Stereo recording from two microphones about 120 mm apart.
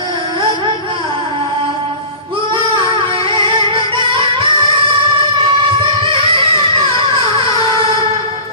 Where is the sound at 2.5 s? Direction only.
45° right (ahead or behind).